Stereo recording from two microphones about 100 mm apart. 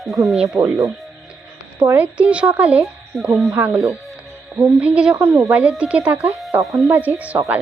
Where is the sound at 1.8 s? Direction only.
20° right (ahead or behind).